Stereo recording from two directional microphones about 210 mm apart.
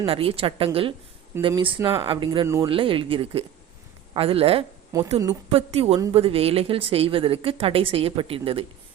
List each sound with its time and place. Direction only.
0.0 s a woman's voice: 25° right (ahead or behind)